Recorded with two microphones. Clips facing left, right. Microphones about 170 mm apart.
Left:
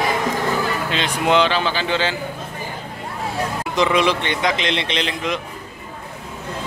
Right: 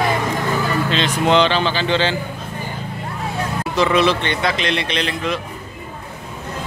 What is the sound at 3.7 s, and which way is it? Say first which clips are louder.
A man's voice: right 2 dB; 15° left (ahead or behind).